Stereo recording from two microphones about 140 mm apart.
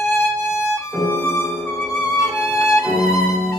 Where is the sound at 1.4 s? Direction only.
20° right (ahead or behind).